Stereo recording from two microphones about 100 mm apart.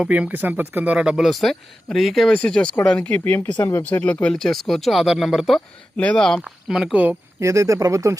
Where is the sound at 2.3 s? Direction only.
10° left (ahead or behind).